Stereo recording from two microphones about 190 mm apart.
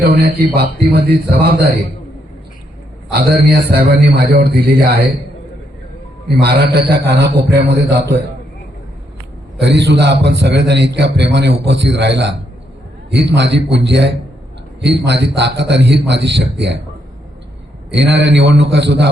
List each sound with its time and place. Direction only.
0.0 s a man's voice: 55° right (ahead or behind)
3.2 s a man's voice: 55° right (ahead or behind)
6.2 s a man's voice: 60° right (ahead or behind)
9.6 s a man's voice: 65° right (ahead or behind)
17.9 s a man's voice: 65° right (ahead or behind)